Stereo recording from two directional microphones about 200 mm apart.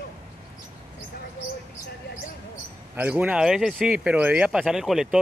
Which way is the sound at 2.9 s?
10° right (ahead or behind).